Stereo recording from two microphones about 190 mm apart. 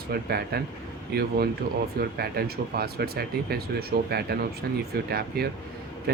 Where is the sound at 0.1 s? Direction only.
55° right (ahead or behind).